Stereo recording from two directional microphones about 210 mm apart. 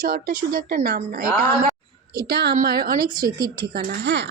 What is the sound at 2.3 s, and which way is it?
Speech, 50° right (ahead or behind).